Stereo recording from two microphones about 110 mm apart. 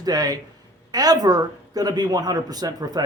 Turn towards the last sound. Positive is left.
turn(degrees=-35)  # may be behind; listen again after turning